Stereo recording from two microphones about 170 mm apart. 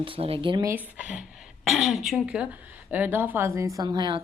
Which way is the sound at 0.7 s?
10° right (ahead or behind).